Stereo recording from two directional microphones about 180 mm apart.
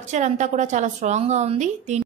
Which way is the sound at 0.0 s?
40° right (ahead or behind).